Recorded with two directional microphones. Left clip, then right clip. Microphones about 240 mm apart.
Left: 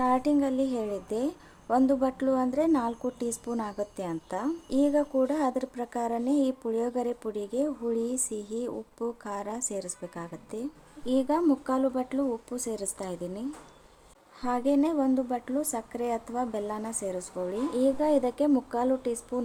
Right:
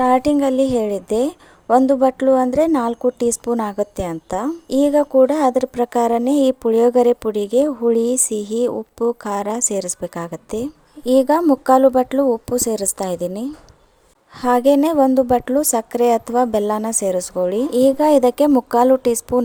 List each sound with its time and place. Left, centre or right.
0.0 s a woman's voice: right